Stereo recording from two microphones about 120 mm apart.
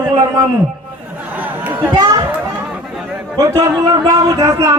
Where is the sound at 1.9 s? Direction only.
40° right (ahead or behind).